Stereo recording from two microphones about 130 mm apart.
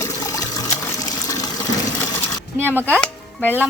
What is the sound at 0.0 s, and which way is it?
Water, 25° left (ahead or behind).